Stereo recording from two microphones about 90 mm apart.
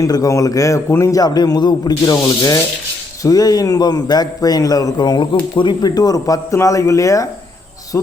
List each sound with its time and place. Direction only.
0.0 s a man's voice: 40° left (ahead or behind)
5.3 s speech: 65° left (ahead or behind)
5.8 s a man's voice: 45° left (ahead or behind)